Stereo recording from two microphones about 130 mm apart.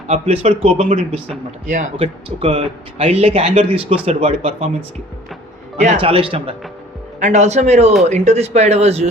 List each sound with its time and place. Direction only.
0.1 s speech: 60° right (ahead or behind)
1.6 s a man's voice: 75° right (ahead or behind)
2.0 s speech: 50° right (ahead or behind)
5.7 s speech: 65° right (ahead or behind)
6.0 s speech: 45° right (ahead or behind)
7.2 s speech: 65° right (ahead or behind)